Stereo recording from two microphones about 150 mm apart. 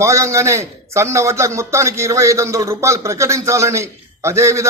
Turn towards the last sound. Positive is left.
turn(degrees=-20)  # may be behind; listen again after turning